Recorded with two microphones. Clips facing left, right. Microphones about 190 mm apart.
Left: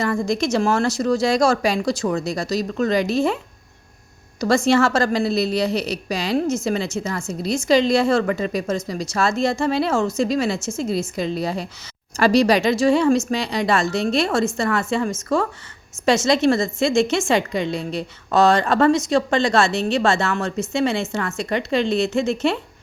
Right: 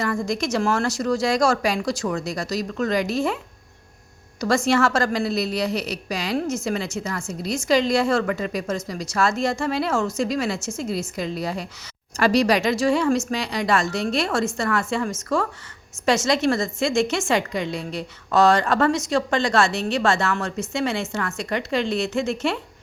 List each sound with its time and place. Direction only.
0.0 s speech: 25° left (ahead or behind)
4.4 s speech: 25° left (ahead or behind)